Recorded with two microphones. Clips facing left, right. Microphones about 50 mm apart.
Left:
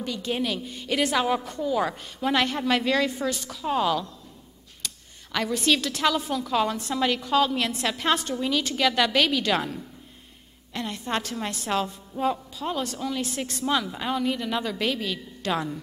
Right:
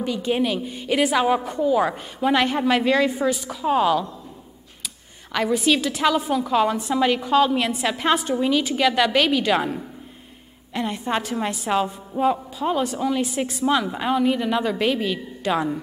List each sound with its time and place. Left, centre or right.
0.0 s a woman's voice: centre